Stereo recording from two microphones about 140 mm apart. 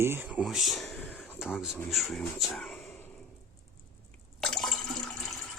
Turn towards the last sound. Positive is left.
turn(degrees=0)  # may be behind; listen again after turning